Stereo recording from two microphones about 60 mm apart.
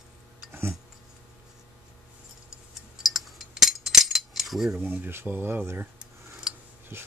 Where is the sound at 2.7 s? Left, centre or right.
Centre.